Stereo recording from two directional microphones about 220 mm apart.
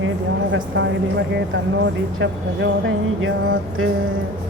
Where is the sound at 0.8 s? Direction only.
55° right (ahead or behind).